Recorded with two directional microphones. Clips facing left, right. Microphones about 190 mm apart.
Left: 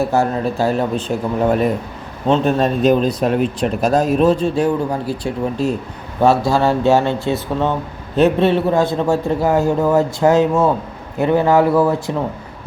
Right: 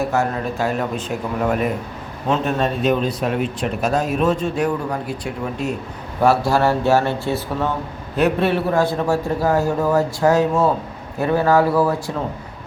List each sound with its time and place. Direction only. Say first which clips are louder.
0.0 s speech: left 4 dB; 30° left (ahead or behind)
6.2 s a man's voice: left 2 dB; 15° left (ahead or behind)